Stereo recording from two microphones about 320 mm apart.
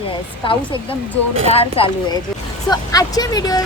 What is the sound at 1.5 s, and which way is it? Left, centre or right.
Speech, centre.